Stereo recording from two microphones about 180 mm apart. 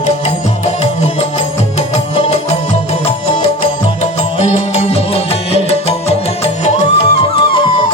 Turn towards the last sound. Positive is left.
turn(degrees=35)  # may be behind; listen again after turning